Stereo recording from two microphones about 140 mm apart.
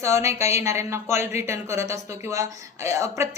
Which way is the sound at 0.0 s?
20° right (ahead or behind).